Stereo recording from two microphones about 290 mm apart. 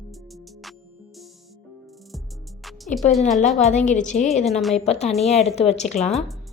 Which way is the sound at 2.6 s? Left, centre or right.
Centre.